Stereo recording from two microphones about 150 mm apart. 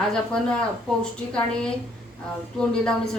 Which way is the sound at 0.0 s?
5° left (ahead or behind).